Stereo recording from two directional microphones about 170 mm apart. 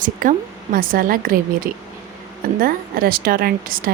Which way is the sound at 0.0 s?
50° right (ahead or behind).